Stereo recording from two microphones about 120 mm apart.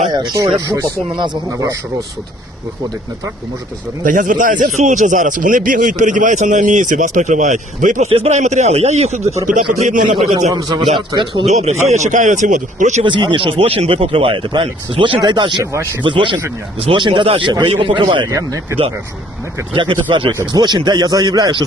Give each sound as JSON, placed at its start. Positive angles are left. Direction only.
{"t": 0.1, "sound": "speech", "side_deg": -40}
{"t": 0.6, "sound": "speech", "side_deg": -25}
{"t": 1.1, "sound": "a man's voice", "side_deg": -40}
{"t": 4.0, "sound": "a man's voice", "side_deg": -90}
{"t": 8.1, "sound": "speech", "side_deg": -65}
{"t": 9.5, "sound": "speech", "side_deg": -85}
{"t": 10.5, "sound": "a man's voice", "side_deg": -35}
{"t": 11.4, "sound": "speech", "side_deg": -70}
{"t": 13.0, "sound": "speech", "side_deg": -40}
{"t": 15.6, "sound": "speech", "side_deg": -25}
{"t": 16.0, "sound": "speech", "side_deg": -40}
{"t": 18.3, "sound": "speech", "side_deg": -25}
{"t": 19.7, "sound": "a man's voice", "side_deg": -45}